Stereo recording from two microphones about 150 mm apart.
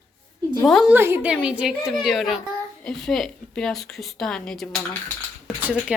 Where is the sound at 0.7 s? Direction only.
Centre (ahead or behind).